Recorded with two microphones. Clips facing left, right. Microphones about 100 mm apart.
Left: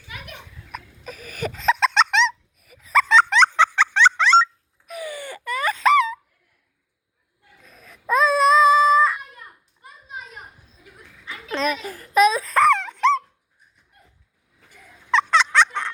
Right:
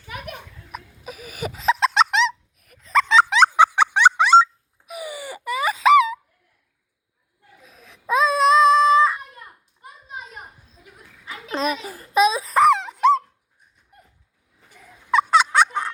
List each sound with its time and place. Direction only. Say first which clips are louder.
0.7 s a sound: even; 5° right (ahead or behind)
4.9 s wail: even; 10° right (ahead or behind)
7.6 s baby cry: left 2 dB; centre (ahead or behind)
9.8 s children playing: right 1 dB; 30° right (ahead or behind)
11.3 s a sound: even; 30° right (ahead or behind)
11.8 s baby cry: left 2 dB; 15° right (ahead or behind)
12.9 s dog: right 2 dB; 10° right (ahead or behind)
15.1 s turkey: right 1 dB; 10° right (ahead or behind)